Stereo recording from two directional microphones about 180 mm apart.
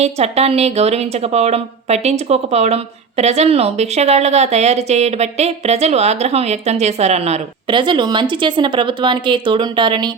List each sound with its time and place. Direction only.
0.0 s speech: 35° right (ahead or behind)